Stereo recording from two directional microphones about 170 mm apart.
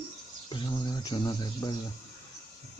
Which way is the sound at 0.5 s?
25° left (ahead or behind).